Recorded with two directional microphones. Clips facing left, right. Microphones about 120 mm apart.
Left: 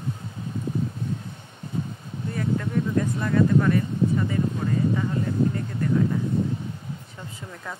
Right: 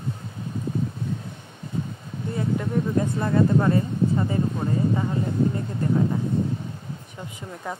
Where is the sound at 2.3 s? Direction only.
25° right (ahead or behind).